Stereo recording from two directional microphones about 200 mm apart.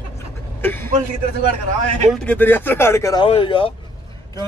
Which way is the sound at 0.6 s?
10° left (ahead or behind).